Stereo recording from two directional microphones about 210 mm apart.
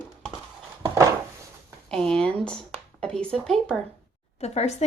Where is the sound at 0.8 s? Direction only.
15° right (ahead or behind).